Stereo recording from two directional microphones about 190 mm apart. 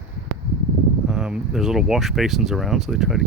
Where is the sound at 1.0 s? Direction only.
5° right (ahead or behind).